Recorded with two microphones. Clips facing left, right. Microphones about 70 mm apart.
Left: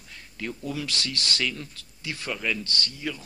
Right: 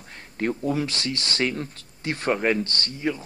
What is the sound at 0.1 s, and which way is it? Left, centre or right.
Speech, right.